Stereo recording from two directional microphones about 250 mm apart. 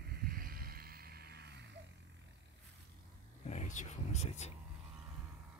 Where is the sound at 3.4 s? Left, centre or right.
Left.